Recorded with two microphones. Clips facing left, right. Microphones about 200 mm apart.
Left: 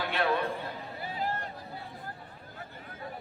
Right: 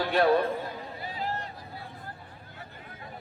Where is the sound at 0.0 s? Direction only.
40° right (ahead or behind).